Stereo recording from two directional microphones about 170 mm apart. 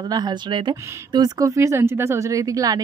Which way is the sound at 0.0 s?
25° right (ahead or behind).